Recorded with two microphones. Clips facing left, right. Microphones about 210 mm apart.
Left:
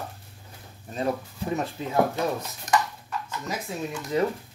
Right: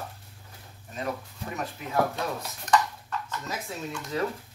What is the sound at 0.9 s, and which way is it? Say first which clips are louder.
Speech: left 5 dB; 30° left (ahead or behind).